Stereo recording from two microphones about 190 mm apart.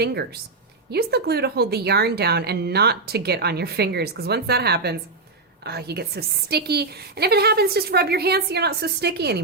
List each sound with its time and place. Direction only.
0.0 s a woman's voice: 60° right (ahead or behind)